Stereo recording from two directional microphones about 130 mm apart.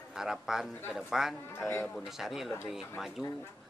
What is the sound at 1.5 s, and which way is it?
Speech, 20° left (ahead or behind).